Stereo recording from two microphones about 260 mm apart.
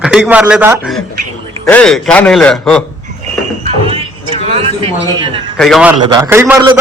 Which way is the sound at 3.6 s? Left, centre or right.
Right.